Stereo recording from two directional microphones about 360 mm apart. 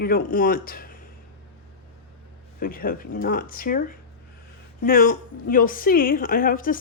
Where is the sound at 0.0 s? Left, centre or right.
Left.